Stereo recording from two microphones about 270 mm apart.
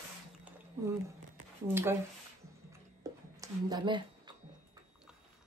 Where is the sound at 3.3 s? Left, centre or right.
Centre.